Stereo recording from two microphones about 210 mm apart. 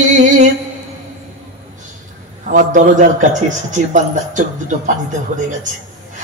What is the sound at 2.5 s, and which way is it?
A man's voice, 35° right (ahead or behind).